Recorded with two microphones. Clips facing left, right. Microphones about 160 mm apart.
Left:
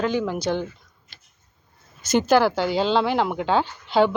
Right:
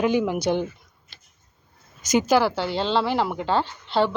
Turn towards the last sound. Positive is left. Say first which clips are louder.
# left 3 dB
turn(degrees=0)  # may be behind; listen again after turning